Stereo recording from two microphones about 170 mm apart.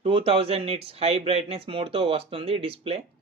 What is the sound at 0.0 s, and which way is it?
Speech, 35° right (ahead or behind).